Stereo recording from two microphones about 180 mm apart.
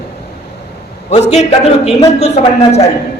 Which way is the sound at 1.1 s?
40° left (ahead or behind).